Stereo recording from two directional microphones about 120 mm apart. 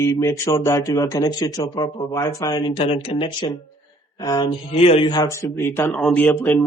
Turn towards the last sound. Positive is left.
turn(degrees=15)  # may be behind; listen again after turning